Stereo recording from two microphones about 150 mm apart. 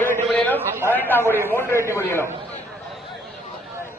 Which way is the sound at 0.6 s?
15° right (ahead or behind).